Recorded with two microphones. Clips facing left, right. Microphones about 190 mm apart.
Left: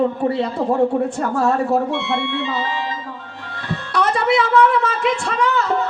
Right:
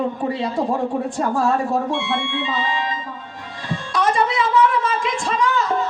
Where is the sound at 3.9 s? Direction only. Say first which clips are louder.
Left 2 dB; 65° left (ahead or behind).